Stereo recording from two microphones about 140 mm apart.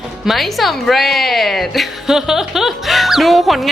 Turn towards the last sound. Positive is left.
turn(degrees=0)  # may be behind; listen again after turning